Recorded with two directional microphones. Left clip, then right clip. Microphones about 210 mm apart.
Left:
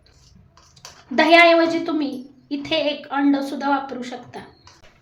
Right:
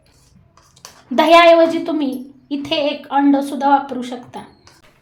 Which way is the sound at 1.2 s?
25° right (ahead or behind).